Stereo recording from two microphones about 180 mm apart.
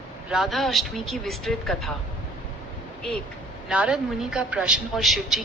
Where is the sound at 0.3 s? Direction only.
Centre (ahead or behind).